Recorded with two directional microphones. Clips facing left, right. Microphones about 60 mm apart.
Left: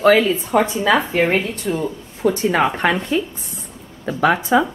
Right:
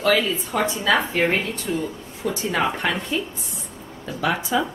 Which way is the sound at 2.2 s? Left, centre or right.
Left.